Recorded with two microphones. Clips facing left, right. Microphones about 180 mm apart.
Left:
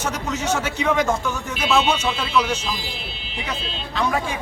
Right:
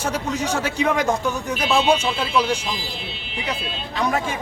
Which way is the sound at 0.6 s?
15° right (ahead or behind).